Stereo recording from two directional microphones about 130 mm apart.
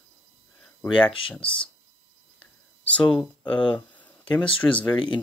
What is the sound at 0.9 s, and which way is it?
Speech, 40° left (ahead or behind).